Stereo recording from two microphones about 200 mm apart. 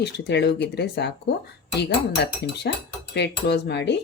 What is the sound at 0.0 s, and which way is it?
Speech, 55° left (ahead or behind).